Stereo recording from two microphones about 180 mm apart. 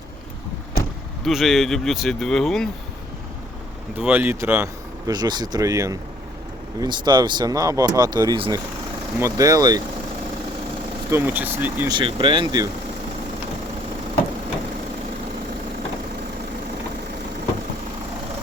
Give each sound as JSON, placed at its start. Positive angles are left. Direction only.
{"t": 1.2, "sound": "speech", "side_deg": 0}
{"t": 3.9, "sound": "speech", "side_deg": -10}
{"t": 11.1, "sound": "speech", "side_deg": -10}
{"t": 11.9, "sound": "speech", "side_deg": -25}